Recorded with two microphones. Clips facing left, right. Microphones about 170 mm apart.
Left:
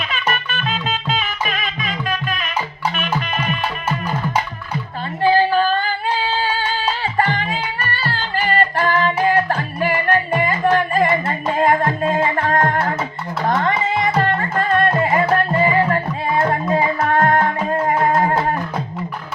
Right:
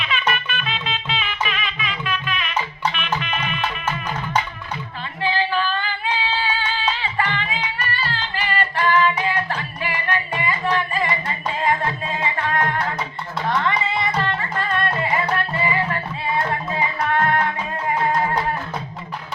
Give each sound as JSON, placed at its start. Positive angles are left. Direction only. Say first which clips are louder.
{"t": 0.0, "sound": "music", "louder": "left 1 dB", "side_deg": 40}
{"t": 5.2, "sound": "female singing", "louder": "left 7 dB", "side_deg": 40}
{"t": 13.4, "sound": "music", "louder": "left 3 dB", "side_deg": 45}